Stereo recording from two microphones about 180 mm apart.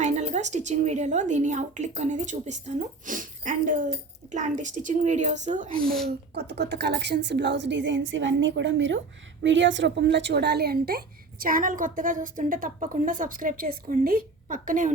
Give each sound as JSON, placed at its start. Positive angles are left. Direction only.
{"t": 0.0, "sound": "speech", "side_deg": -40}
{"t": 5.8, "sound": "speech", "side_deg": 0}
{"t": 6.3, "sound": "a woman's voice", "side_deg": -70}